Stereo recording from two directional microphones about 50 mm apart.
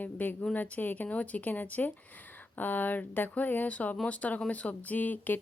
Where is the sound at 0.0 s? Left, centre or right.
Left.